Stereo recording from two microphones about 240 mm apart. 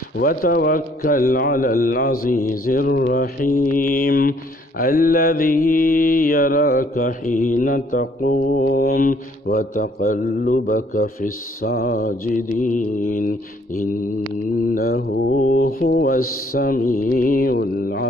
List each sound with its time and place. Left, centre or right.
0.2 s mantra: left
14.7 s mantra: left